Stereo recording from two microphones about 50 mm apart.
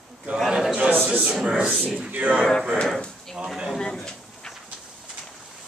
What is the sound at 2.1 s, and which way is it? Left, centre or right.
Speech, right.